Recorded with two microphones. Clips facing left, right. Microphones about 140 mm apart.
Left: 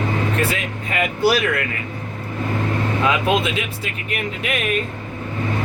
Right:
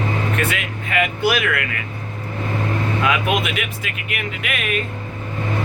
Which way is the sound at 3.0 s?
30° left (ahead or behind).